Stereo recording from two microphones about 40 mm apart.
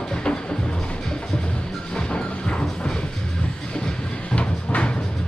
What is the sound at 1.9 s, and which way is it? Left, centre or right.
Music, left.